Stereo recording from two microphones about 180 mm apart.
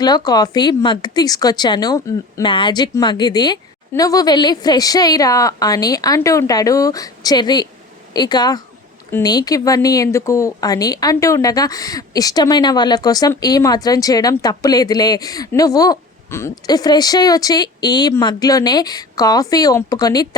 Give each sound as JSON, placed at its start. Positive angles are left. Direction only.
{"t": 0.0, "sound": "speech", "side_deg": 20}